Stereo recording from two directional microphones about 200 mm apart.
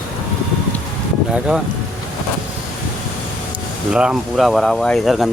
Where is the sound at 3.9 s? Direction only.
5° right (ahead or behind).